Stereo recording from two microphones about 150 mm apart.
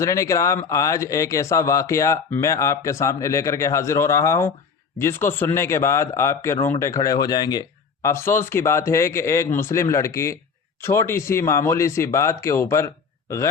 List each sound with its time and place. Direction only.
0.0 s speech: 20° left (ahead or behind)